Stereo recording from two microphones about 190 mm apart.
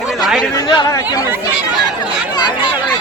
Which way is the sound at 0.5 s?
20° left (ahead or behind).